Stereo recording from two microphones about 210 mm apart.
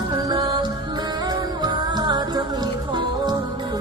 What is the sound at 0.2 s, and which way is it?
Music, 20° right (ahead or behind).